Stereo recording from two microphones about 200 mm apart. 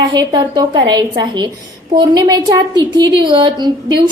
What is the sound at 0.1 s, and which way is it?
A woman's voice, 20° right (ahead or behind).